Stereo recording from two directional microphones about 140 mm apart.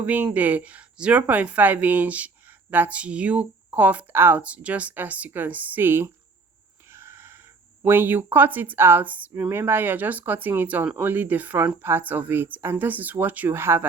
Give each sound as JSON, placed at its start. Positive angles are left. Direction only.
{"t": 0.0, "sound": "speech", "side_deg": -10}
{"t": 6.9, "sound": "a sound", "side_deg": -20}
{"t": 7.8, "sound": "speech", "side_deg": -15}